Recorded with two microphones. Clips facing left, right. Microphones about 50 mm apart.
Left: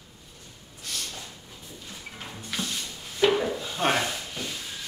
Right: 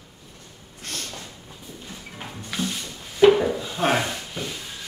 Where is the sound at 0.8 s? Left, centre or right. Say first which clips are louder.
Right 2 dB; right.